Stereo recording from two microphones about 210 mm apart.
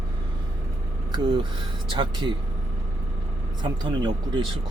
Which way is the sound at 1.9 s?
25° right (ahead or behind).